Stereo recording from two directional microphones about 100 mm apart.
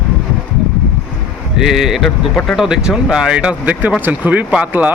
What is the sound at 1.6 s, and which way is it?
Speech, 5° right (ahead or behind).